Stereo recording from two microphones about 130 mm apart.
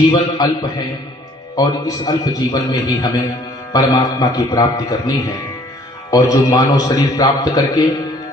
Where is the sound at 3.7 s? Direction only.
30° left (ahead or behind).